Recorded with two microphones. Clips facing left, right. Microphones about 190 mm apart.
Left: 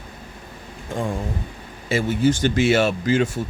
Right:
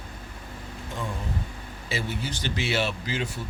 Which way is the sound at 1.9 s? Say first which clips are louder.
Left 13 dB; 50° left (ahead or behind).